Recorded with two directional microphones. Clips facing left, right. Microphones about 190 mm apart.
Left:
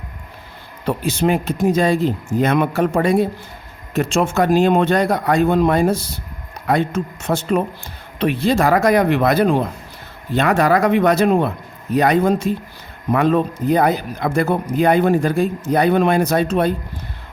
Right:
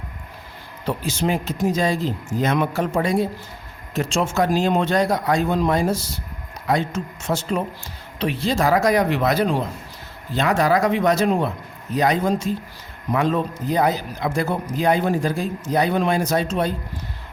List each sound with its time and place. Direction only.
0.9 s speech: 60° left (ahead or behind)